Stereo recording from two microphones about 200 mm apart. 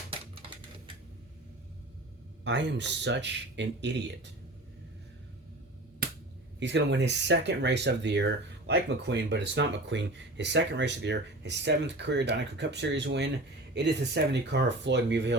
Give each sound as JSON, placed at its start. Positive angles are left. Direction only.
{"t": 2.4, "sound": "speech", "side_deg": -60}
{"t": 6.0, "sound": "finger snapping", "side_deg": -50}
{"t": 6.6, "sound": "speech", "side_deg": -60}